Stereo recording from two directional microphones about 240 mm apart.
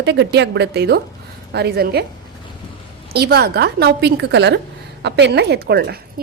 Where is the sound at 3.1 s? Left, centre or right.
Right.